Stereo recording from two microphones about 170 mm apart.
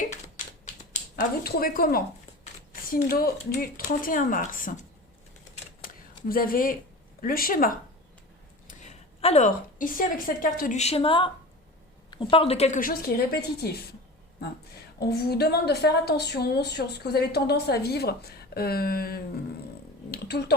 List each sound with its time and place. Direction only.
0.6 s typewriter: 45° left (ahead or behind)
1.5 s speech: 60° left (ahead or behind)
6.2 s speech: 55° left (ahead or behind)
8.6 s a sound: 40° left (ahead or behind)
9.7 s speech: 55° left (ahead or behind)
14.9 s a woman's voice: 70° left (ahead or behind)
20.1 s a sound: 75° left (ahead or behind)